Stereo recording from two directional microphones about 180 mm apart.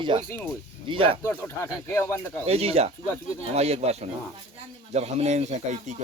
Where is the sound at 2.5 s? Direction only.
35° right (ahead or behind).